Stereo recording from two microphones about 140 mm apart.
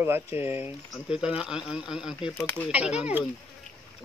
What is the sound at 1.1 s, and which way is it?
Speech, 5° right (ahead or behind).